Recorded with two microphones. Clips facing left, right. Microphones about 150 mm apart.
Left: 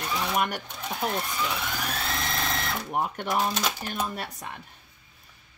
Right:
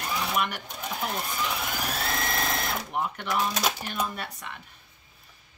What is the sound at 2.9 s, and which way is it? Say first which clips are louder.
Speech: left 3 dB; 45° left (ahead or behind).